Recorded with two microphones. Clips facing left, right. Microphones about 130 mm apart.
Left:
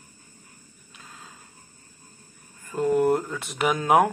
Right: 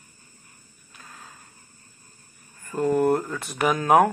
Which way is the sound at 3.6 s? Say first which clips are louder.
Right 2 dB; 15° left (ahead or behind).